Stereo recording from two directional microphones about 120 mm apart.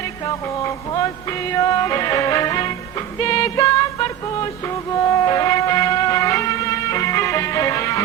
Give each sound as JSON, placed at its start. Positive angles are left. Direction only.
{"t": 0.3, "sound": "music", "side_deg": 30}